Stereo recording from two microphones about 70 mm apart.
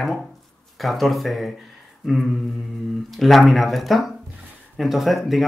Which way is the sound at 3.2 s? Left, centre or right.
Centre.